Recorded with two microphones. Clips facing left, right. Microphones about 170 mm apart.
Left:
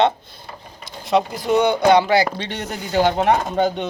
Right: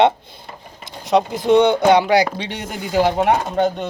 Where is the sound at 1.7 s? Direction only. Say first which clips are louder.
Right 1 dB; 20° right (ahead or behind).